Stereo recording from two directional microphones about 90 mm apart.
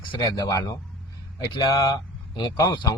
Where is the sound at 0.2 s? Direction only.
40° left (ahead or behind).